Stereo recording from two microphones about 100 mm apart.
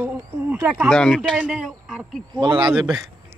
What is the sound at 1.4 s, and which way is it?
Speech, 5° right (ahead or behind).